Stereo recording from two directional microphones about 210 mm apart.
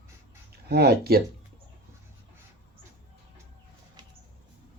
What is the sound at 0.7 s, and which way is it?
Speech, 50° right (ahead or behind).